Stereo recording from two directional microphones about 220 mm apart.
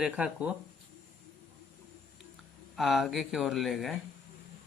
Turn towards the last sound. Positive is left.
turn(degrees=0)  # may be behind; listen again after turning